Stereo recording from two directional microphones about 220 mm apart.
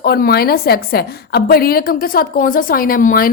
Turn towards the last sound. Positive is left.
turn(degrees=40)  # may be behind; listen again after turning